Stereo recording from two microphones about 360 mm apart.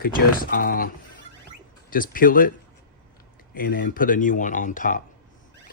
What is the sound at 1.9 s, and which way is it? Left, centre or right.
Speech, left.